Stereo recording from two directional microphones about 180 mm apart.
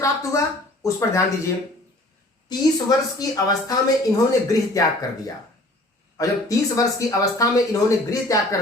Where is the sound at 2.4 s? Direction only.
20° left (ahead or behind).